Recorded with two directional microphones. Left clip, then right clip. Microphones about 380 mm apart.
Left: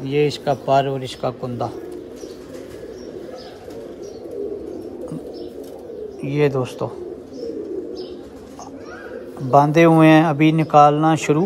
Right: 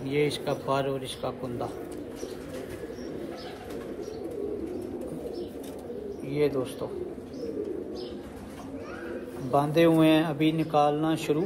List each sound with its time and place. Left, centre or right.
0.0 s speech: left
6.2 s speech: left
9.5 s speech: left